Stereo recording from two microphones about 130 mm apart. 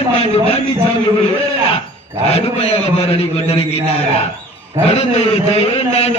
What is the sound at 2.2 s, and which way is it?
A man's voice, 50° left (ahead or behind).